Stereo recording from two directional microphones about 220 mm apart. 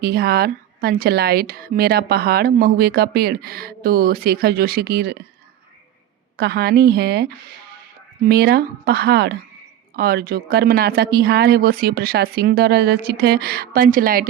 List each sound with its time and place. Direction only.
0.0 s a woman's voice: 45° right (ahead or behind)
6.3 s a woman's voice: 45° right (ahead or behind)